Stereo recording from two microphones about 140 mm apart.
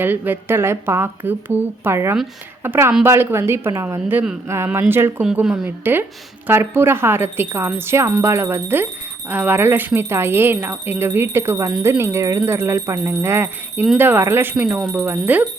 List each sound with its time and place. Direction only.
0.0 s speech: 15° right (ahead or behind)
5.2 s speech: 5° right (ahead or behind)